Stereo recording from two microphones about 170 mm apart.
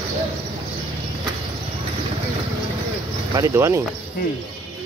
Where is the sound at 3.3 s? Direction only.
15° right (ahead or behind).